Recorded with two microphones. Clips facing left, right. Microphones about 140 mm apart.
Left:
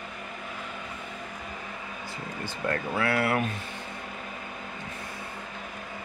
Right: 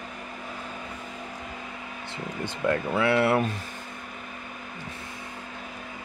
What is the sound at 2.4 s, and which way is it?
Speech, 20° right (ahead or behind).